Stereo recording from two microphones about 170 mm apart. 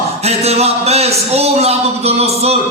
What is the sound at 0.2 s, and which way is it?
Music, 40° right (ahead or behind).